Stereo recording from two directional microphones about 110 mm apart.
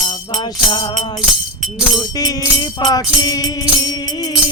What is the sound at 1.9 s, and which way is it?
Music, 40° left (ahead or behind).